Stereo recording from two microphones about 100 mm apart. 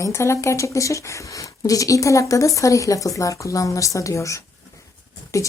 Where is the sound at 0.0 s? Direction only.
30° left (ahead or behind).